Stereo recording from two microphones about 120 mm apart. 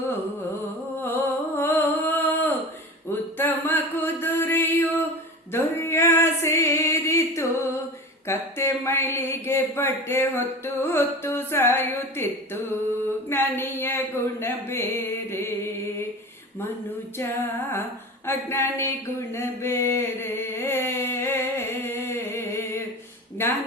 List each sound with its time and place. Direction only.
1.5 s music: 20° left (ahead or behind)
8.3 s speech: 20° left (ahead or behind)
13.6 s a sound: 20° left (ahead or behind)
15.3 s mantra: 20° left (ahead or behind)
17.2 s music: 20° left (ahead or behind)
18.3 s a sound: 20° left (ahead or behind)